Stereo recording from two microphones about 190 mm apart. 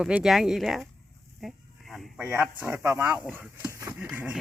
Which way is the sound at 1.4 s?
Centre (ahead or behind).